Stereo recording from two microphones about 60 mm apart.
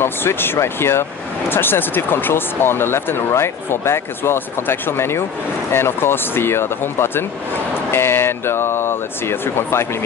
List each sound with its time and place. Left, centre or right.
0.0 s speech: left